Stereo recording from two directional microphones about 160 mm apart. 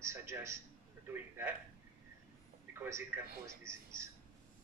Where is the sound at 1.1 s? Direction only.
10° right (ahead or behind).